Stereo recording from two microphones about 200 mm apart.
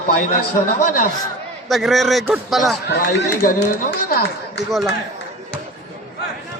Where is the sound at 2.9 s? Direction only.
55° left (ahead or behind).